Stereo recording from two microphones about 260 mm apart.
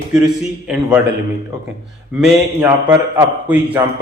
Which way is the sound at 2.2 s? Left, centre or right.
Centre.